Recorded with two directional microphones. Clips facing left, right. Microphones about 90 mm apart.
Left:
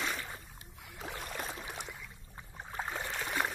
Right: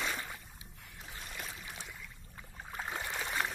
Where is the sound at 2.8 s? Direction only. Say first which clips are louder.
Left 2 dB; 10° left (ahead or behind).